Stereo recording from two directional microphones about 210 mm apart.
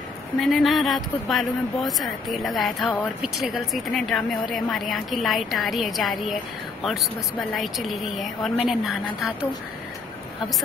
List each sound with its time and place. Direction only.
0.4 s a woman's voice: centre (ahead or behind)